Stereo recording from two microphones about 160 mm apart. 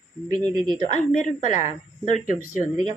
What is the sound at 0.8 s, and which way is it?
Speech, 50° left (ahead or behind).